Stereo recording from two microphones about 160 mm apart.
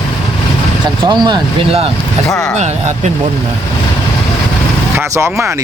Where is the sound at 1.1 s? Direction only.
30° right (ahead or behind).